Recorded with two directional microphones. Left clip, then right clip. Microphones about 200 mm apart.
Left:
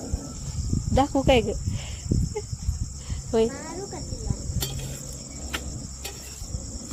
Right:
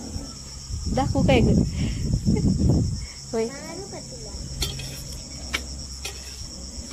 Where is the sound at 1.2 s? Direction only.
5° left (ahead or behind).